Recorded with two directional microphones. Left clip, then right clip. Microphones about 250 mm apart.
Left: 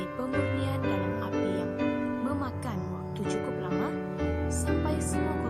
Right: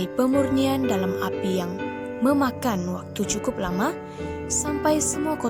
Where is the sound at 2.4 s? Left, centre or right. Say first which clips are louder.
Right 11 dB; right.